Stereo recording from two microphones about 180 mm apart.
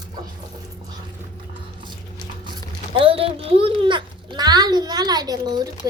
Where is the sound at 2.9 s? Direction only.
30° right (ahead or behind).